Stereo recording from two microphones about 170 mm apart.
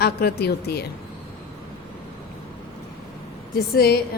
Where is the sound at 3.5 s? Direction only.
70° left (ahead or behind).